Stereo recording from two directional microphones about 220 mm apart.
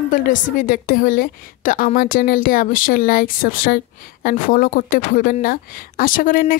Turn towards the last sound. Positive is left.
turn(degrees=40)  # may be behind; listen again after turning